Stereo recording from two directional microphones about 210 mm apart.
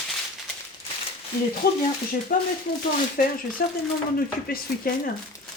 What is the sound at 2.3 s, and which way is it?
Speech, 40° left (ahead or behind).